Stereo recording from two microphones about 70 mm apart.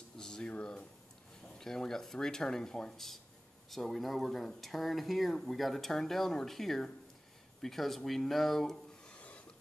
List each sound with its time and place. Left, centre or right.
0.2 s a sound: centre
1.6 s speech: centre
9.1 s rub: left